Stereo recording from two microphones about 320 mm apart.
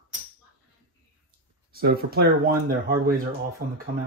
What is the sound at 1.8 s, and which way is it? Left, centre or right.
Speech, right.